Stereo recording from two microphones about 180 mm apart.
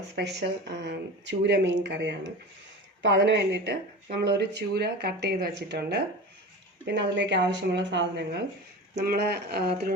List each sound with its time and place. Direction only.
0.2 s speech: 70° right (ahead or behind)
9.0 s speech: 65° right (ahead or behind)